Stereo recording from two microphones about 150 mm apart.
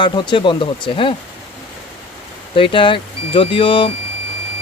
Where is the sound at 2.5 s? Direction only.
35° left (ahead or behind).